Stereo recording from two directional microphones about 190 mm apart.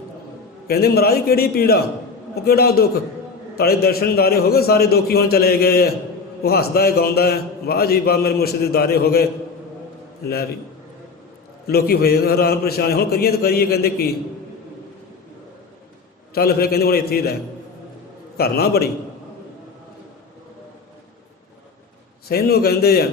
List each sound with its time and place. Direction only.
0.7 s a man's voice: 55° left (ahead or behind)
10.2 s a man's voice: 55° left (ahead or behind)
11.6 s a man's voice: 55° left (ahead or behind)
16.3 s a man's voice: 55° left (ahead or behind)
18.3 s a man's voice: 55° left (ahead or behind)
22.3 s a man's voice: 55° left (ahead or behind)